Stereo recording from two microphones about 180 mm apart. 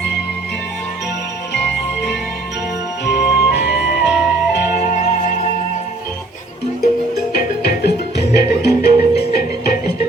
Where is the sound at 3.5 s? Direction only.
70° left (ahead or behind).